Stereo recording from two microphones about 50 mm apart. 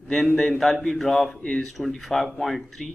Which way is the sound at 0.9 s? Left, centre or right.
Centre.